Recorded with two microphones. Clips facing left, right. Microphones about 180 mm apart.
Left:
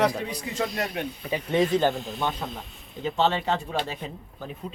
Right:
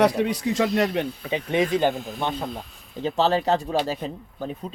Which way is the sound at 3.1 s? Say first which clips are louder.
Right 3 dB; 35° right (ahead or behind).